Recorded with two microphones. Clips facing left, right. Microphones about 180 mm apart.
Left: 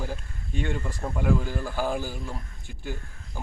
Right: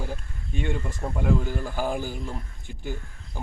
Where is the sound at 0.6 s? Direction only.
5° right (ahead or behind).